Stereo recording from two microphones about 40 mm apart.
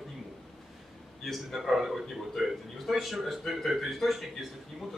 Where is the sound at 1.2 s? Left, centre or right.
Centre.